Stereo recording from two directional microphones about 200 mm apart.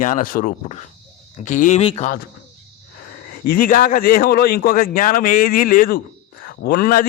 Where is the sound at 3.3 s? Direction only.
45° left (ahead or behind).